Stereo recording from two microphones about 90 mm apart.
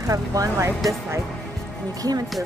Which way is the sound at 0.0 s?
40° right (ahead or behind).